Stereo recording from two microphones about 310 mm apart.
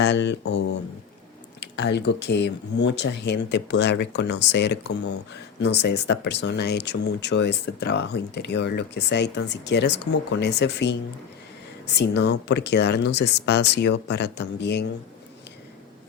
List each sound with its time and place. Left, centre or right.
0.0 s speech: left
11.9 s speech: left